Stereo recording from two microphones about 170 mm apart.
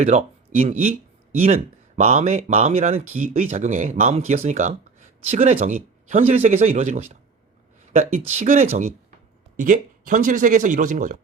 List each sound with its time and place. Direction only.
0.0 s speech: 40° right (ahead or behind)
2.0 s speech: 40° right (ahead or behind)
7.9 s speech: 45° right (ahead or behind)
9.6 s speech: 50° right (ahead or behind)